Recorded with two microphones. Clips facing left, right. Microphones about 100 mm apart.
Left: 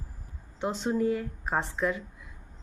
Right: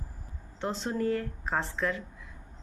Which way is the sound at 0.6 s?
5° left (ahead or behind).